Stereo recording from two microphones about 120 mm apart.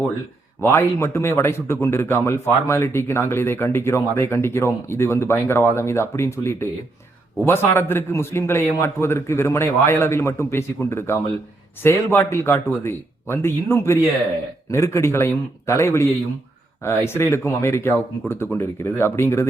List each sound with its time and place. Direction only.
0.6 s a man's voice: 20° left (ahead or behind)